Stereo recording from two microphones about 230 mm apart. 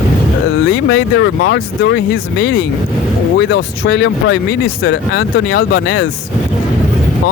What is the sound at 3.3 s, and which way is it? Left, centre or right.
Speech, left.